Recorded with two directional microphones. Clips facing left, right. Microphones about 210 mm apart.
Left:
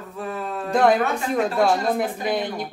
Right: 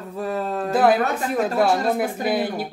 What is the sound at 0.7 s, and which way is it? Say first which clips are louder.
Speech: even; 5° right (ahead or behind).